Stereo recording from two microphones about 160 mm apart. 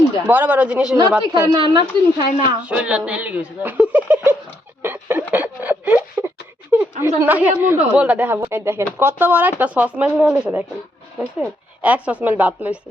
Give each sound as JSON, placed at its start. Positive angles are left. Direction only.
{"t": 0.3, "sound": "speech", "side_deg": -10}
{"t": 1.2, "sound": "speech", "side_deg": -25}
{"t": 2.6, "sound": "speech", "side_deg": -5}
{"t": 4.8, "sound": "a sound", "side_deg": -15}
{"t": 7.2, "sound": "speech", "side_deg": -10}